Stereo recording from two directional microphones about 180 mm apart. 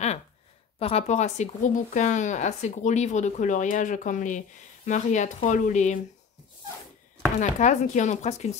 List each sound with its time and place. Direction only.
0.7 s speech: 35° left (ahead or behind)
7.3 s speech: 40° left (ahead or behind)